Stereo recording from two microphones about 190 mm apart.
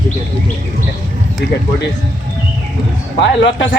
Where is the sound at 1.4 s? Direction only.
60° left (ahead or behind).